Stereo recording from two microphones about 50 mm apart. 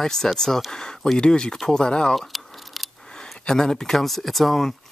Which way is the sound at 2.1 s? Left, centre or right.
Centre.